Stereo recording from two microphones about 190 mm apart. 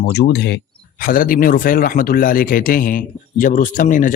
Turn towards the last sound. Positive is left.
turn(degrees=45)  # may be behind; listen again after turning